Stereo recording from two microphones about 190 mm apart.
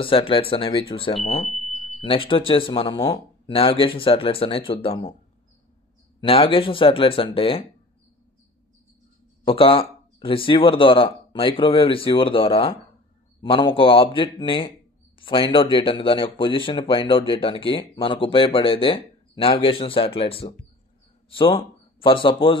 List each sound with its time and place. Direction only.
0.0 s speech: 30° left (ahead or behind)
1.5 s smoke detector: centre (ahead or behind)
2.0 s speech: 30° left (ahead or behind)
6.2 s speech: 30° left (ahead or behind)
9.4 s speech: 30° left (ahead or behind)